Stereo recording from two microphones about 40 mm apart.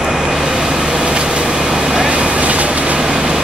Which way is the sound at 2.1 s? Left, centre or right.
Right.